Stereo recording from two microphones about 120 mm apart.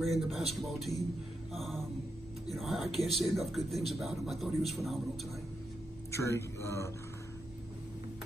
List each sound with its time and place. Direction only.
0.0 s speech: centre (ahead or behind)
1.5 s mantra: centre (ahead or behind)
2.4 s speech: centre (ahead or behind)
6.1 s speech: 25° left (ahead or behind)